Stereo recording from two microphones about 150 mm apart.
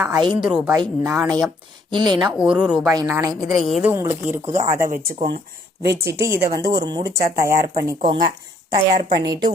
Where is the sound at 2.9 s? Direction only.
20° right (ahead or behind).